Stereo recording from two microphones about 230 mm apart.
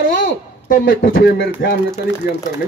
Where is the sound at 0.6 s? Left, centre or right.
Left.